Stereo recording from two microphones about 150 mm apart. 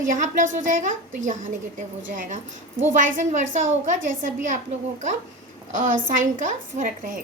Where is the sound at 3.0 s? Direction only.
60° right (ahead or behind).